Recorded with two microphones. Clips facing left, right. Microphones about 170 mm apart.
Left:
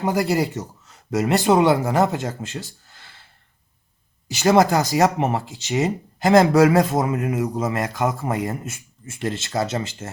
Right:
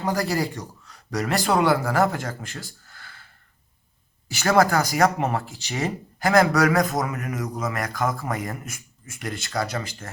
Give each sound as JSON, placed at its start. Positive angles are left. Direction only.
{"t": 0.0, "sound": "a man's voice", "side_deg": 20}
{"t": 4.3, "sound": "speech", "side_deg": 20}